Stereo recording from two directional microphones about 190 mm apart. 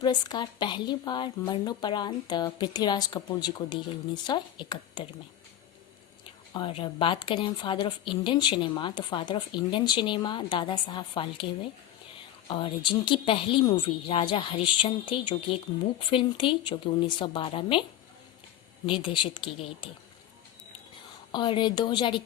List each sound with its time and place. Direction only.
0.0 s speech: 20° left (ahead or behind)
6.5 s speech: 25° left (ahead or behind)
12.5 s speech: 25° left (ahead or behind)
18.9 s speech: 25° left (ahead or behind)
21.3 s speech: 25° left (ahead or behind)